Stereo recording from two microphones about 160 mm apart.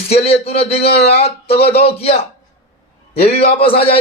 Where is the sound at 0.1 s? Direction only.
40° left (ahead or behind).